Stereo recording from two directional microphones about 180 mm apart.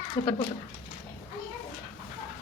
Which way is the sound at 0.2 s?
50° left (ahead or behind).